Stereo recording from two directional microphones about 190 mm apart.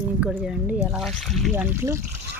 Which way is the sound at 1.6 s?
15° right (ahead or behind).